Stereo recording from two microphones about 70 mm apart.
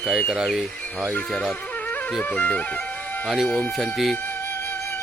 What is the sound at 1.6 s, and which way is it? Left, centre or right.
Music, left.